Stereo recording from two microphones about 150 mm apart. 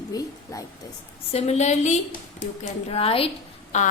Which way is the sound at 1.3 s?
45° left (ahead or behind).